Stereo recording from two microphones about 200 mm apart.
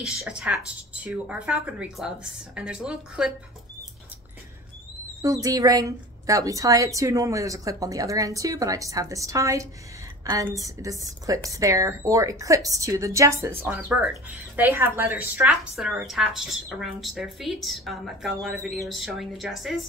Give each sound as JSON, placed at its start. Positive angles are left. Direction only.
{"t": 0.0, "sound": "a woman's voice", "side_deg": -5}
{"t": 5.2, "sound": "a woman's voice", "side_deg": -15}